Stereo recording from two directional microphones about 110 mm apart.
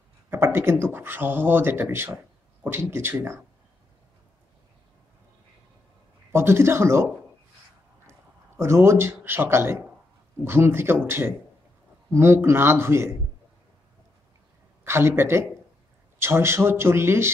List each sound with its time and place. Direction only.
0.3 s speech: 20° right (ahead or behind)
6.3 s speech: 25° right (ahead or behind)
8.1 s a man's voice: 25° right (ahead or behind)
14.9 s speech: 20° right (ahead or behind)